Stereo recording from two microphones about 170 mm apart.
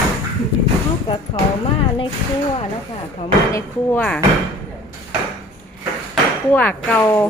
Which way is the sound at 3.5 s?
15° left (ahead or behind).